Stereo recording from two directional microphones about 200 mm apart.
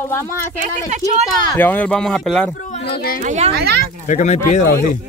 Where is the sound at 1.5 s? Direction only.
10° left (ahead or behind).